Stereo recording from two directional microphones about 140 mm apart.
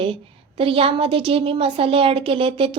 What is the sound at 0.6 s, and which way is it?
A woman's voice, 40° right (ahead or behind).